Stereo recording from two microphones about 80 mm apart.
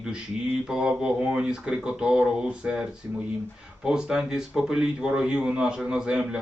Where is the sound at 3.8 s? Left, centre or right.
Centre.